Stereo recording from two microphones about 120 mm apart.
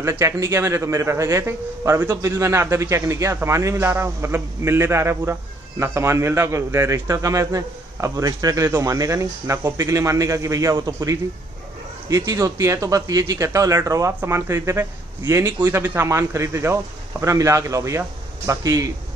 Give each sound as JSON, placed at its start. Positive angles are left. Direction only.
{"t": 0.0, "sound": "a man's voice", "side_deg": -20}